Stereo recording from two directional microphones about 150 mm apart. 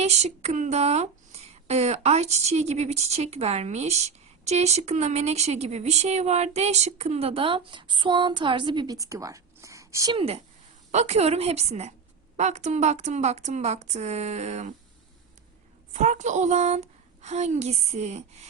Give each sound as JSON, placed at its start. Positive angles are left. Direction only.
{"t": 0.0, "sound": "speech", "side_deg": -50}
{"t": 10.2, "sound": "a woman's voice", "side_deg": -40}
{"t": 15.9, "sound": "speech", "side_deg": -50}